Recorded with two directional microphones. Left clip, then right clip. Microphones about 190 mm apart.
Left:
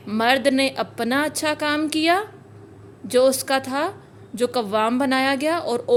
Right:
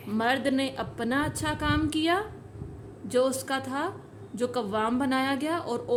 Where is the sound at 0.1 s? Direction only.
30° left (ahead or behind).